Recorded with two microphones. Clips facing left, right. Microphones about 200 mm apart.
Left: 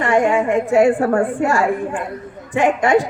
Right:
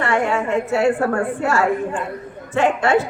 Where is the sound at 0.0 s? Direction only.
15° left (ahead or behind).